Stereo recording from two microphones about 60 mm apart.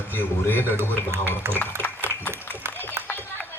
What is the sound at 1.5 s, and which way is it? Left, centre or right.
Speech, right.